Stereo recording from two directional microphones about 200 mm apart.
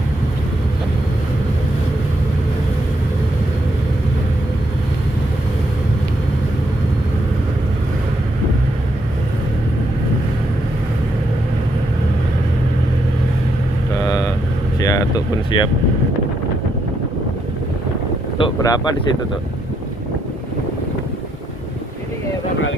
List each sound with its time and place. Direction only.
14.0 s vehicle: 20° left (ahead or behind)
14.8 s a sound: 15° left (ahead or behind)
18.4 s boat: 15° left (ahead or behind)